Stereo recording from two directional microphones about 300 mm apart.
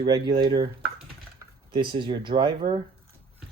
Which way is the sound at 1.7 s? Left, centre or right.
Centre.